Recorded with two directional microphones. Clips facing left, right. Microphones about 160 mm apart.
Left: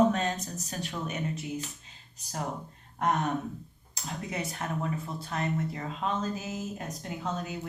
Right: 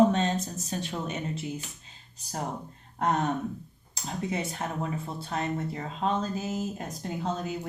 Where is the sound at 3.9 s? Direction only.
25° right (ahead or behind).